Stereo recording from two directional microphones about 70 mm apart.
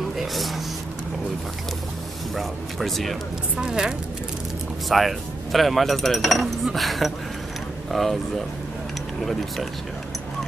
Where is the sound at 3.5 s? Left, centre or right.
Centre.